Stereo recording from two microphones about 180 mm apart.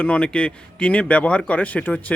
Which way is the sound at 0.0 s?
5° left (ahead or behind).